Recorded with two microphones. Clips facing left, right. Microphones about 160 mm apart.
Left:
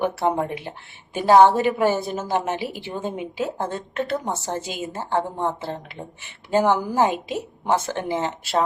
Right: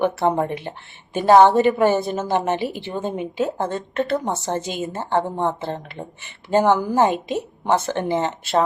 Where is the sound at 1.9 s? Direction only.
55° right (ahead or behind).